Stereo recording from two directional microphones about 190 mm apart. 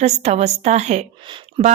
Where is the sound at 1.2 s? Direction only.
25° right (ahead or behind).